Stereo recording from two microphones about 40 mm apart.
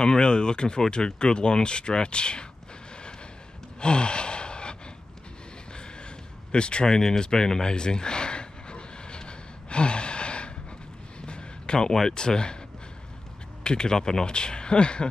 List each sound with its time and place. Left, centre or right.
0.0 s speech: left
3.8 s gasp: left
5.8 s a sound: left
11.9 s speech: centre
13.7 s speech: centre